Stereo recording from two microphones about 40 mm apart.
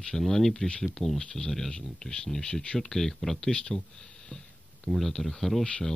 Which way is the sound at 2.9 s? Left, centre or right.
Centre.